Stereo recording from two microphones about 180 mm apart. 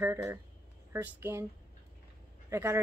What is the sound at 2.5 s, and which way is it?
Speech, 15° right (ahead or behind).